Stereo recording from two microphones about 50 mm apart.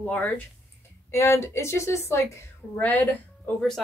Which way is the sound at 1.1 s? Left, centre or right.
Left.